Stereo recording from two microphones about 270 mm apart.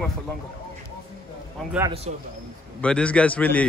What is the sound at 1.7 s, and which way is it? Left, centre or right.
Speech, centre.